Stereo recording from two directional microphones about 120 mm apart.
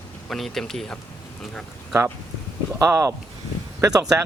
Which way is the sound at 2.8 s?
25° right (ahead or behind).